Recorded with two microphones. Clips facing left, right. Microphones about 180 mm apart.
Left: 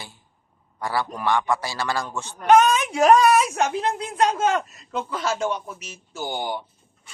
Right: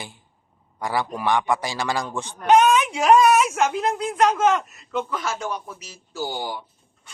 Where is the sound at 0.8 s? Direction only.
15° right (ahead or behind).